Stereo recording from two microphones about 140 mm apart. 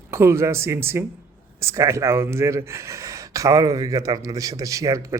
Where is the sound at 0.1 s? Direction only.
20° right (ahead or behind).